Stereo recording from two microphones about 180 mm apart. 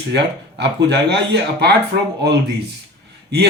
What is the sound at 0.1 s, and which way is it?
Speech, 70° right (ahead or behind).